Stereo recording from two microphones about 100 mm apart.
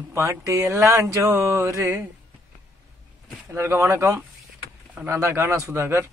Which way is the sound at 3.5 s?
25° right (ahead or behind).